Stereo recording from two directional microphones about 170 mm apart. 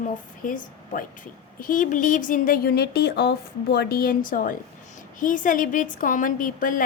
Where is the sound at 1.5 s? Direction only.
50° left (ahead or behind).